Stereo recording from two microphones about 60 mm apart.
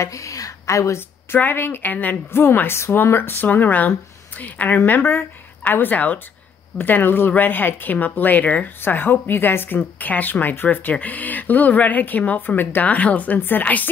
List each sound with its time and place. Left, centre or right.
0.0 s a woman's voice: left
0.9 s speech: left
2.4 s speech: left